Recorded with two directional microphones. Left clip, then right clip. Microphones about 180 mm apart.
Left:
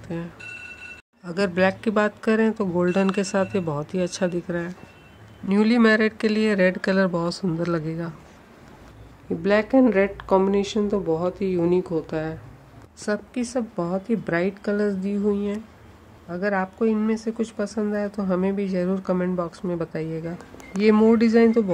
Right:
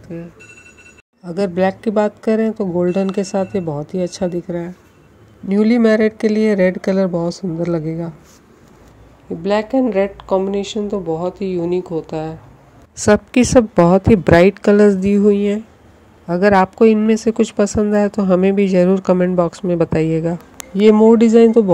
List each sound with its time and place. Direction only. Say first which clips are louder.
1.3 s speech: right 4 dB; 15° right (ahead or behind)
9.4 s speech: right 2 dB; centre (ahead or behind)
12.9 s a woman's voice: right 14 dB; 45° right (ahead or behind)
21.1 s a man's voice: right 8 dB; 25° right (ahead or behind)